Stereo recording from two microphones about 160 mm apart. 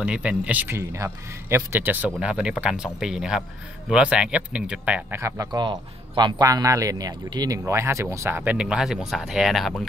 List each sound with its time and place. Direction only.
0.0 s speech: 5° right (ahead or behind)